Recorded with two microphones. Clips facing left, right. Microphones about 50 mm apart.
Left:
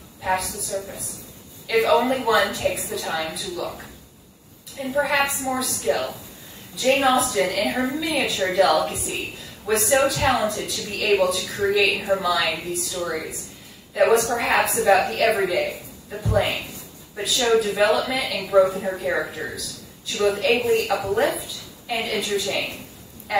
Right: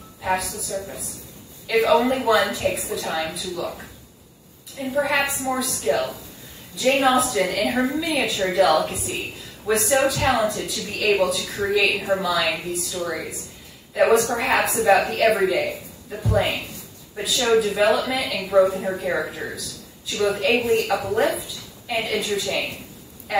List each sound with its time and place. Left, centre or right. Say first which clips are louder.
0.2 s a woman's voice: even; centre
10.9 s speech: even; centre
11.2 s a woman's voice: left 1 dB; centre